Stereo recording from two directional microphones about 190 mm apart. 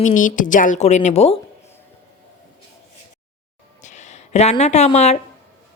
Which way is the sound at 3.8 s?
40° left (ahead or behind).